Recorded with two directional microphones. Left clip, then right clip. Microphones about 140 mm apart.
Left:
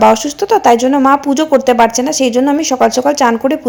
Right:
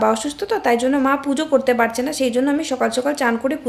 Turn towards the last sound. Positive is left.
turn(degrees=40)  # may be behind; listen again after turning